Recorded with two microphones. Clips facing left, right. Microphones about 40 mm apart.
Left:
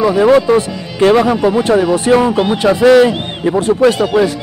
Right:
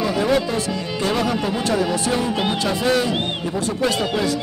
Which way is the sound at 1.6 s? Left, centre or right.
Left.